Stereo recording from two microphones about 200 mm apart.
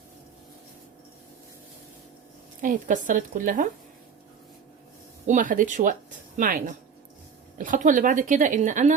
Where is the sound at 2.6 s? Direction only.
40° right (ahead or behind).